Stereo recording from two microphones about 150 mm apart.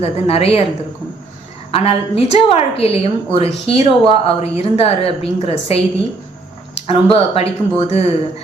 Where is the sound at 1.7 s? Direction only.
40° left (ahead or behind).